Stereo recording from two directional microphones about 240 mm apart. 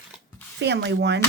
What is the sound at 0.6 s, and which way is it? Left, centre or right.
Speech, right.